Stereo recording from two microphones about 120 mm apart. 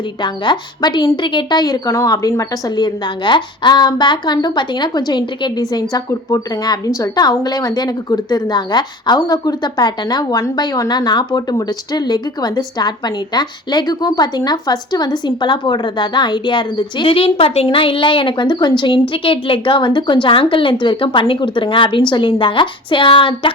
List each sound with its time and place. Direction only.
0.2 s a woman's voice: 40° left (ahead or behind)